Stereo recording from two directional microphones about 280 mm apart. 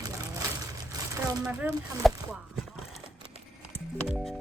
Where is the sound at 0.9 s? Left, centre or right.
Centre.